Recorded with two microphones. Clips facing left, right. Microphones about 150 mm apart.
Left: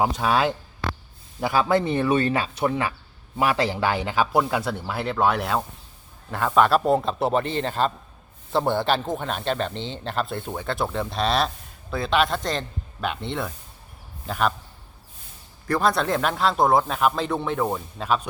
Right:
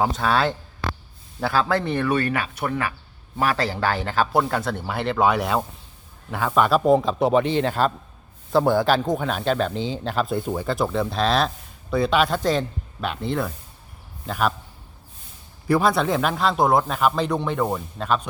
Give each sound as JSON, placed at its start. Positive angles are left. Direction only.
{"t": 0.0, "sound": "speech", "side_deg": 10}
{"t": 15.6, "sound": "speech", "side_deg": -5}